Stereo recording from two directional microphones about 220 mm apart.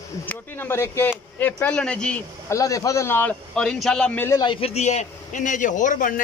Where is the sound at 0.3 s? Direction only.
10° left (ahead or behind).